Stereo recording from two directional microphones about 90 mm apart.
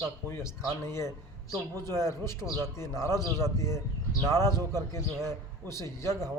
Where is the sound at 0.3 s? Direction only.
30° left (ahead or behind).